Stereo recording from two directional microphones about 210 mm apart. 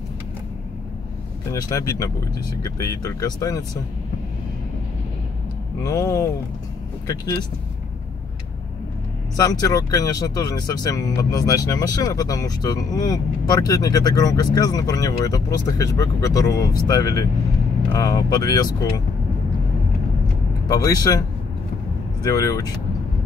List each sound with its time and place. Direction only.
1.5 s speech: 15° left (ahead or behind)
5.9 s speech: 15° left (ahead or behind)
9.4 s speech: 15° left (ahead or behind)
20.6 s speech: 20° left (ahead or behind)
22.2 s speech: 15° left (ahead or behind)